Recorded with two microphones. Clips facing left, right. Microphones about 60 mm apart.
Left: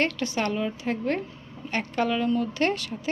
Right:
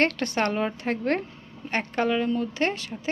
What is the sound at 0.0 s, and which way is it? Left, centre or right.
A woman's voice, right.